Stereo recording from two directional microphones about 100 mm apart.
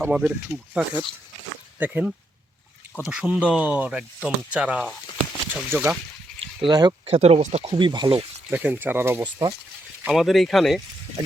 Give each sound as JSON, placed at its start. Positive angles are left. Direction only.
{"t": 0.1, "sound": "speech", "side_deg": -5}
{"t": 4.9, "sound": "a sound", "side_deg": 0}
{"t": 6.7, "sound": "speech", "side_deg": -40}
{"t": 7.0, "sound": "speech", "side_deg": -90}
{"t": 7.8, "sound": "speech", "side_deg": -50}
{"t": 8.4, "sound": "speech", "side_deg": -20}
{"t": 9.2, "sound": "speech", "side_deg": -45}
{"t": 10.1, "sound": "speech", "side_deg": 0}